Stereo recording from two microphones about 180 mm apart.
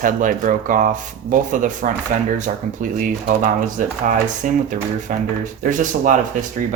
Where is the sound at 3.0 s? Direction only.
50° right (ahead or behind).